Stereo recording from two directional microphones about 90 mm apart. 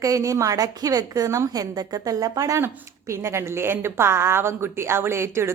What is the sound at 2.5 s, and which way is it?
A woman's voice, 30° right (ahead or behind).